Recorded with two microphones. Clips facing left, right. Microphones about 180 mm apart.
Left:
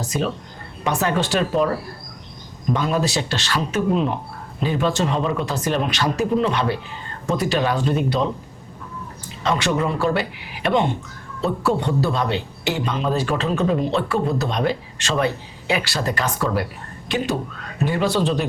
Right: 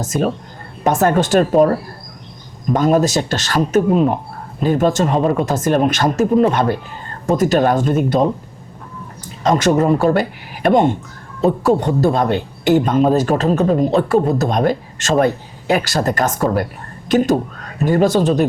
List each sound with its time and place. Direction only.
0.0 s speech: 45° right (ahead or behind)